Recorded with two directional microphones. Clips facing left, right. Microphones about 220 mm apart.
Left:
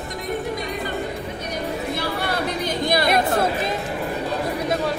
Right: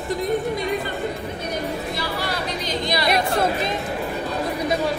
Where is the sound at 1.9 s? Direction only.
55° left (ahead or behind).